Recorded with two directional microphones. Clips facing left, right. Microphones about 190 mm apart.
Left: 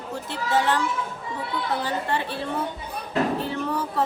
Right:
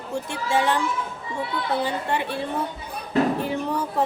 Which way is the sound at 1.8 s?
15° right (ahead or behind).